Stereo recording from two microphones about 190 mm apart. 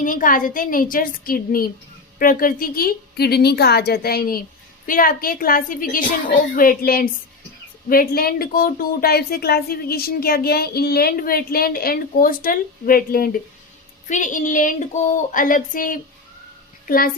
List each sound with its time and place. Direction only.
0.0 s a woman's voice: 45° left (ahead or behind)